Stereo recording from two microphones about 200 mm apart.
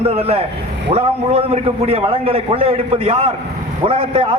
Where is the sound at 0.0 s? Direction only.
30° right (ahead or behind).